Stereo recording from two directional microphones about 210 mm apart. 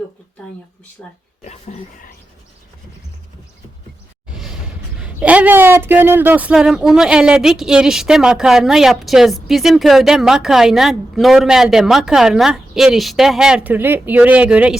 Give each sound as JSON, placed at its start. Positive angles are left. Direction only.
{"t": 1.0, "sound": "speech", "side_deg": 5}
{"t": 1.5, "sound": "speech", "side_deg": 30}
{"t": 4.4, "sound": "speech", "side_deg": -5}